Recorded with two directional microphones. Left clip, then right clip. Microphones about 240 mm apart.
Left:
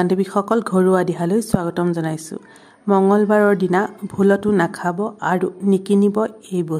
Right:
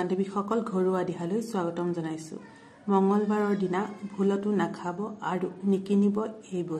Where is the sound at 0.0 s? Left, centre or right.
Left.